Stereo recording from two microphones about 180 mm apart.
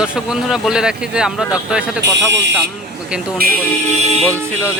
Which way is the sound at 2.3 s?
75° right (ahead or behind).